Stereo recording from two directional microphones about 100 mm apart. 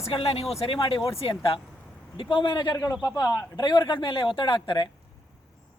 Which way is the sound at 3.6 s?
45° left (ahead or behind).